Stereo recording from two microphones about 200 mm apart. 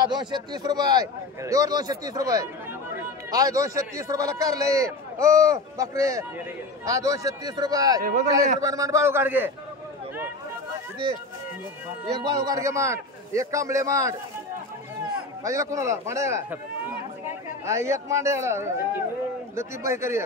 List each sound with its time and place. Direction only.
0.0 s a man's voice: 20° right (ahead or behind)
12.3 s a man's voice: 15° right (ahead or behind)
15.4 s a man's voice: 15° right (ahead or behind)
17.6 s a man's voice: 15° right (ahead or behind)